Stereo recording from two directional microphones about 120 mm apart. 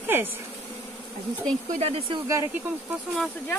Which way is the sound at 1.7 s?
55° right (ahead or behind).